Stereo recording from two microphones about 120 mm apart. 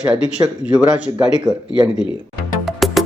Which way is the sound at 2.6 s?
Centre (ahead or behind).